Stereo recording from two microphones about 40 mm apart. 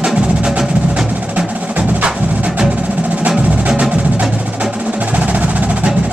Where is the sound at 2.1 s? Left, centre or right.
Right.